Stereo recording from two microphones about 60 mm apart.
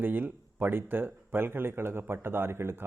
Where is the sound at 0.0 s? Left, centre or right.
Right.